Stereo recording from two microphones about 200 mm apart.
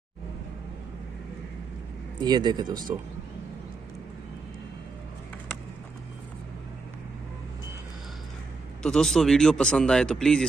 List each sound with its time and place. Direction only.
2.1 s speech: 20° right (ahead or behind)
8.8 s speech: centre (ahead or behind)